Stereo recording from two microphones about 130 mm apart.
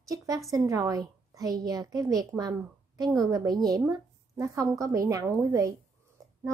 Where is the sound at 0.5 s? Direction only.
25° right (ahead or behind).